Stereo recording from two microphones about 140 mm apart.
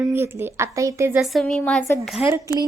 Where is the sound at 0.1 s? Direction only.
15° right (ahead or behind).